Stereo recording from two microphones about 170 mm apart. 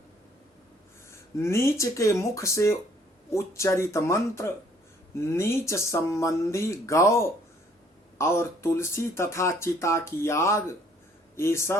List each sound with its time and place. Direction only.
1.1 s speech: 15° left (ahead or behind)